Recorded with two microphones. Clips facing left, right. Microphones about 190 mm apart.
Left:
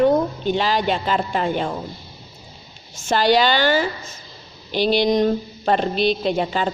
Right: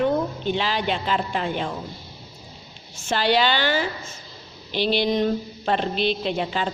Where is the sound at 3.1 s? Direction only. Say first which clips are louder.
Left 4 dB; 45° left (ahead or behind).